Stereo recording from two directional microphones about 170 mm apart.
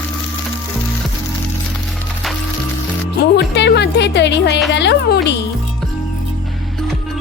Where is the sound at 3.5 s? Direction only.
85° left.